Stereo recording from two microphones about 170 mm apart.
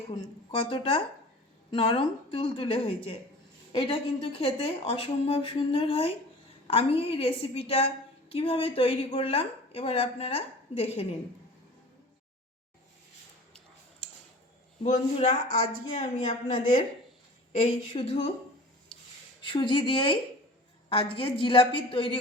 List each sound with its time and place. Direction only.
0.7 s a woman's voice: 30° left (ahead or behind)
15.2 s speech: 45° left (ahead or behind)
15.6 s a woman's voice: 25° left (ahead or behind)
17.6 s a woman's voice: 35° left (ahead or behind)
18.9 s a sound: 5° left (ahead or behind)
19.4 s a woman's voice: 30° left (ahead or behind)